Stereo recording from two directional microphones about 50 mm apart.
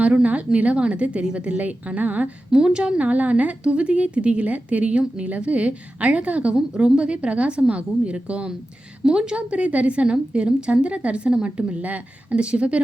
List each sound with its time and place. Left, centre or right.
0.0 s a woman's voice: right
2.5 s a woman's voice: centre
3.0 s a woman's voice: right